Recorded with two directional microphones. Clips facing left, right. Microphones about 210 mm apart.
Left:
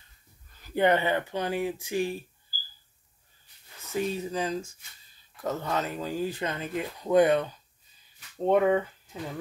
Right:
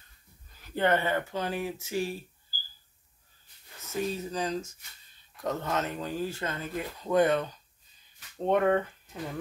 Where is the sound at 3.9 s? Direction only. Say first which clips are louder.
Left 2 dB; 15° left (ahead or behind).